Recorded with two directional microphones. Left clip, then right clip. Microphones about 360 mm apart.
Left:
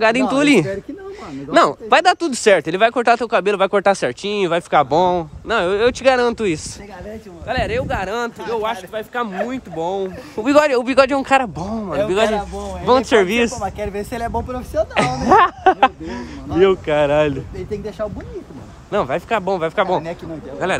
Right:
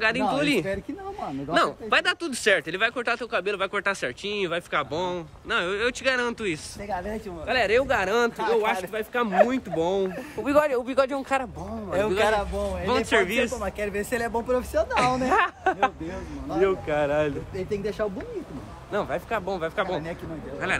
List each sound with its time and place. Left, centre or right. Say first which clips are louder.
0.0 s speech: left 8 dB; centre
7.4 s speech: left 1 dB; centre
10.4 s speech: left 8 dB; left
12.8 s speech: left 10 dB; centre
15.0 s speech: left 10 dB; centre
17.6 s speech: left 2 dB; centre
18.9 s speech: left 9 dB; left